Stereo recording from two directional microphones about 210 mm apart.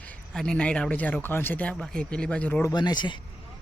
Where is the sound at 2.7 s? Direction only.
20° left (ahead or behind).